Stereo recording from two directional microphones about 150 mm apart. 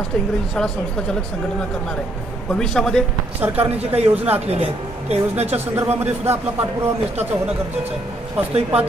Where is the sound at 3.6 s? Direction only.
40° right (ahead or behind).